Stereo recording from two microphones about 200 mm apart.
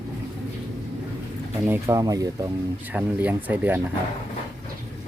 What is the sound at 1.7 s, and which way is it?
Speech, 15° right (ahead or behind).